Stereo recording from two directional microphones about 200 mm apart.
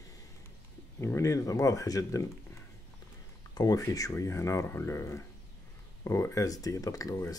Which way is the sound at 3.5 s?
20° left (ahead or behind).